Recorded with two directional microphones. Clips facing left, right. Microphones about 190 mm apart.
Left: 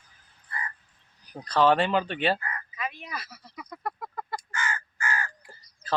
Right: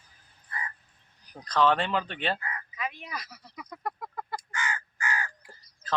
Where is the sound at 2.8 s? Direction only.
15° right (ahead or behind).